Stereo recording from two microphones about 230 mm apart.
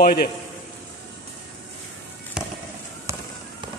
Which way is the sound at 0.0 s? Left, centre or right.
Left.